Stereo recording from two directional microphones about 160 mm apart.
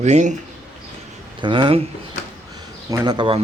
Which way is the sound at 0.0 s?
45° right (ahead or behind).